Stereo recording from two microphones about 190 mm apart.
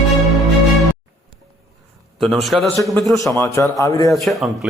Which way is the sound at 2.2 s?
Centre (ahead or behind).